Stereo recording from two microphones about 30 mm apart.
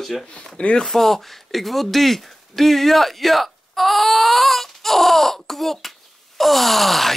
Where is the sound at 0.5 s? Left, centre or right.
Left.